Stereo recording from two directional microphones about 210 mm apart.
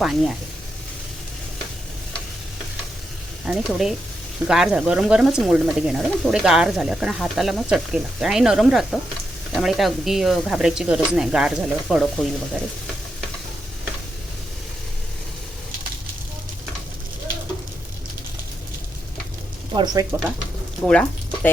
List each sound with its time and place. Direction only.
0.0 s speech: centre (ahead or behind)
3.4 s speech: centre (ahead or behind)
19.7 s speech: 20° right (ahead or behind)
20.8 s speech: 5° left (ahead or behind)